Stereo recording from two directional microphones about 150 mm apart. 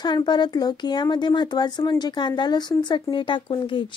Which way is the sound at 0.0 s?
30° left (ahead or behind).